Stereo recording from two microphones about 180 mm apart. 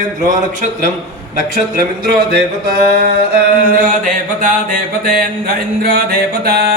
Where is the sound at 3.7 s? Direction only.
50° right (ahead or behind).